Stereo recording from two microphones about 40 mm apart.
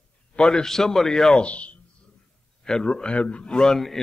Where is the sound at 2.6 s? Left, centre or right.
Centre.